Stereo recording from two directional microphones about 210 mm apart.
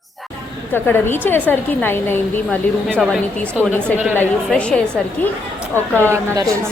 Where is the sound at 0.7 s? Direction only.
10° left (ahead or behind).